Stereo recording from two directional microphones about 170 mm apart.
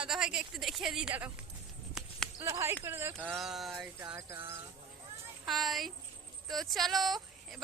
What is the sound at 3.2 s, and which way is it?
Speech, centre (ahead or behind).